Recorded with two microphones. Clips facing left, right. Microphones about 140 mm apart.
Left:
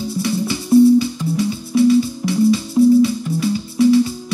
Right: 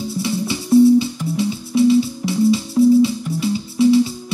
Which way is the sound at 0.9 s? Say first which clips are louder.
Left 1 dB; 25° right (ahead or behind).